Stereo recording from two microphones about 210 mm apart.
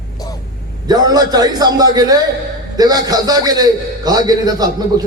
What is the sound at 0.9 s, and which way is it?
A man's voice, 20° right (ahead or behind).